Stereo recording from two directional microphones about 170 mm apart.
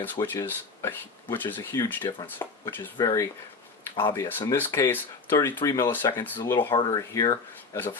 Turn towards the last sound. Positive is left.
turn(degrees=15)  # may be behind; listen again after turning